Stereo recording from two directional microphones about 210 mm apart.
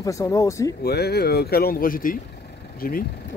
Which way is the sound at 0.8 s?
50° left (ahead or behind).